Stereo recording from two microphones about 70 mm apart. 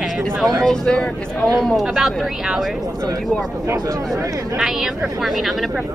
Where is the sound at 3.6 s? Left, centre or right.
Right.